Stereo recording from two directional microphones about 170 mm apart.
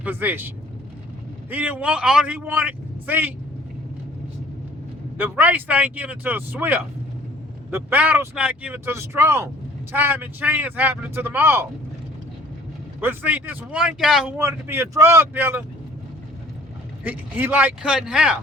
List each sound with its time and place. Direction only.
0.0 s speech: 10° right (ahead or behind)
5.1 s speech: 10° right (ahead or behind)
13.0 s speech: 10° right (ahead or behind)
14.3 s speech: 15° right (ahead or behind)
17.0 s speech: 10° right (ahead or behind)